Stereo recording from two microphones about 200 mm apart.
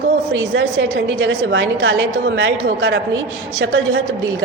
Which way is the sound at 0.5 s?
65° right (ahead or behind).